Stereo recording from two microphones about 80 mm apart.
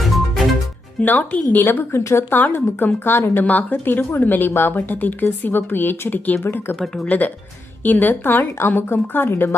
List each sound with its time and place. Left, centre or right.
1.0 s a woman's voice: left
6.7 s a woman's voice: centre